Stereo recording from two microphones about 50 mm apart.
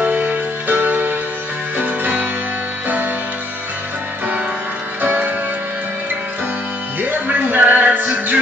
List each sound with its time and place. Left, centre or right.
0.0 s music: right
5.0 s music: right
7.0 s music: right